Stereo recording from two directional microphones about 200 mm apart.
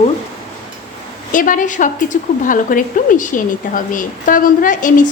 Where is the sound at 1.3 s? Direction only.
40° left (ahead or behind).